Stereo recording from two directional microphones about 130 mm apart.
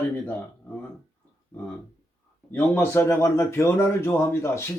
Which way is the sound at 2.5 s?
15° left (ahead or behind).